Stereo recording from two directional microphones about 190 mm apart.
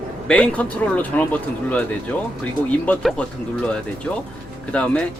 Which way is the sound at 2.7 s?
5° left (ahead or behind).